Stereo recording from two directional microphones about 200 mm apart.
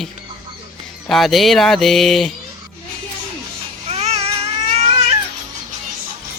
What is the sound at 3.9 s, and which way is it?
Baby cry, 30° right (ahead or behind).